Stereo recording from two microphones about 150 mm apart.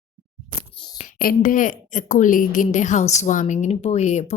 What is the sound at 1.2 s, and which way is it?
A woman's voice, 70° left (ahead or behind).